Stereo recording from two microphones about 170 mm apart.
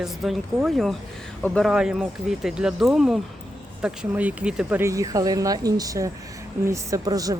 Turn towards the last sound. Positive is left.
turn(degrees=-20)  # may be behind; listen again after turning